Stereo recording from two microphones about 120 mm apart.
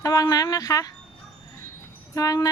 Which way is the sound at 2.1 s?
30° left (ahead or behind).